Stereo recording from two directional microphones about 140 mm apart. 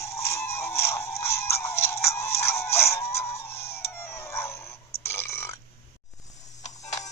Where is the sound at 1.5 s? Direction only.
20° left (ahead or behind).